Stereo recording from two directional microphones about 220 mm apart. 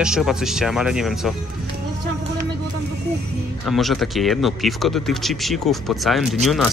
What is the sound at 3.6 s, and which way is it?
Speech, centre (ahead or behind).